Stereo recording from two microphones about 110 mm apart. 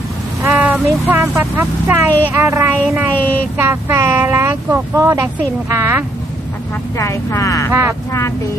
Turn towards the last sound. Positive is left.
turn(degrees=-25)  # may be behind; listen again after turning